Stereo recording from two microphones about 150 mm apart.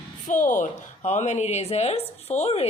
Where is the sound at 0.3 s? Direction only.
60° left (ahead or behind).